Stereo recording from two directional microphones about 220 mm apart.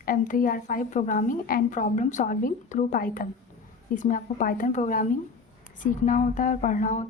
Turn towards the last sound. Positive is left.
turn(degrees=35)  # may be behind; listen again after turning